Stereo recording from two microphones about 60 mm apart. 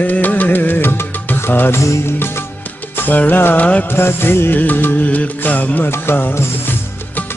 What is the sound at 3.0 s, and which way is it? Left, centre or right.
Music, left.